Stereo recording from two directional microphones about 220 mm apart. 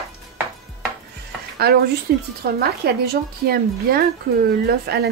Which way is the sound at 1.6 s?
45° right (ahead or behind).